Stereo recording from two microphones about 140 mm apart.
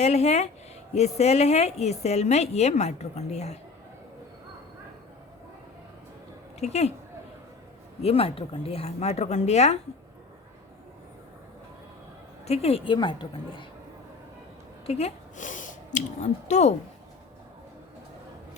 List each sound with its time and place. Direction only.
0.0 s speech: 50° left (ahead or behind)
6.6 s speech: 50° left (ahead or behind)
8.0 s speech: 45° left (ahead or behind)
12.5 s a woman's voice: 45° left (ahead or behind)
14.8 s speech: 50° left (ahead or behind)